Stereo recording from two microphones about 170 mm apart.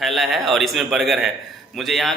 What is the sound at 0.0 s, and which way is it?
A man's voice, centre (ahead or behind).